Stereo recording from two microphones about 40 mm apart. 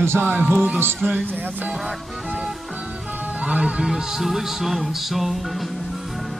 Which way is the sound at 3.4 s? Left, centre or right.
Right.